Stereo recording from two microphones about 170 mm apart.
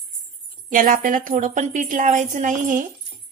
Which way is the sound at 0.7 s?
55° right (ahead or behind).